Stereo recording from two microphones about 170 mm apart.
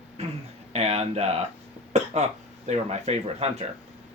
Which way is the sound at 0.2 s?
40° right (ahead or behind).